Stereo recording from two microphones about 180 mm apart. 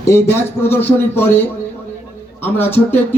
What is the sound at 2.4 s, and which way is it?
Speech, 10° left (ahead or behind).